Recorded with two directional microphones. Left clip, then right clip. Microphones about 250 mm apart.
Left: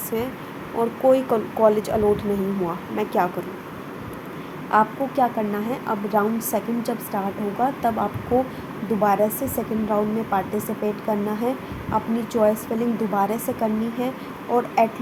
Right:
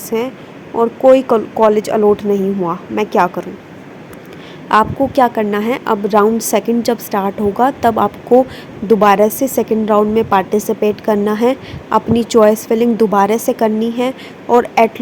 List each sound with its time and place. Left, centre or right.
0.1 s speech: right
4.7 s a woman's voice: right